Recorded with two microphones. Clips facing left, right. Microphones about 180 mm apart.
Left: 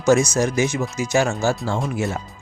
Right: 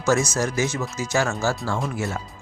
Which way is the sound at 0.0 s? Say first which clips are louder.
Left 5 dB; 15° left (ahead or behind).